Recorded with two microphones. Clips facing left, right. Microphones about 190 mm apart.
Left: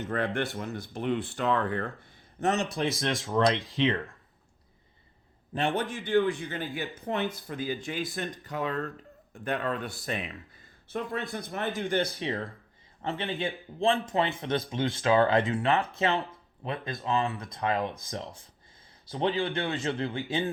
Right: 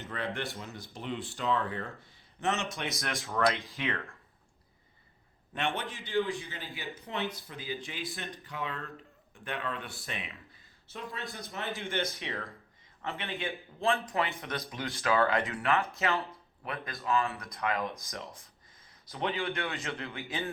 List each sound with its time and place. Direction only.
0.1 s a man's voice: 50° left (ahead or behind)
2.4 s speech: 35° left (ahead or behind); by 4.0 s 20° left (ahead or behind)
5.5 s speech: 40° left (ahead or behind)
10.8 s a man's voice: 55° left (ahead or behind)
11.8 s speech: 35° left (ahead or behind)